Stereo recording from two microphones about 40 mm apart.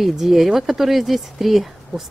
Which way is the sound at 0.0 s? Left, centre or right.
Centre.